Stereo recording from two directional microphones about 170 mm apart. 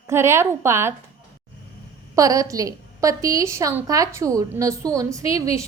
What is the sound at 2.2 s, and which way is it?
A woman's voice, 20° right (ahead or behind).